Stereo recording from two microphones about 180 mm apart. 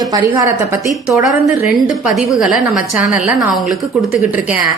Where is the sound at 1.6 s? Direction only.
Centre (ahead or behind).